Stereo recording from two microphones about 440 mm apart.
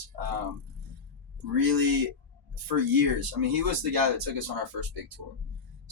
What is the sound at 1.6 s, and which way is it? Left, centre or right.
Speech, right.